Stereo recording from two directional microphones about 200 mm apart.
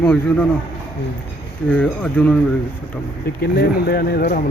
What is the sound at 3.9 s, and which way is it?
Speech, 50° left (ahead or behind).